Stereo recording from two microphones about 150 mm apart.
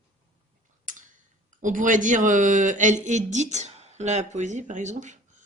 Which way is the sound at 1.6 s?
60° right (ahead or behind).